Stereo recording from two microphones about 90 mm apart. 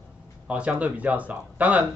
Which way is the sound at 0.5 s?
15° right (ahead or behind).